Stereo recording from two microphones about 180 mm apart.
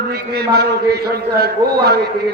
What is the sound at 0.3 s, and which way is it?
A man's voice, 65° right (ahead or behind).